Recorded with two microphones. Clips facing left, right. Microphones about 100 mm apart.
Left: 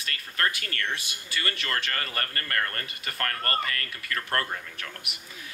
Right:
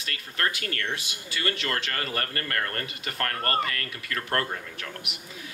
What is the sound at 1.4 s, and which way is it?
Speech, 20° right (ahead or behind).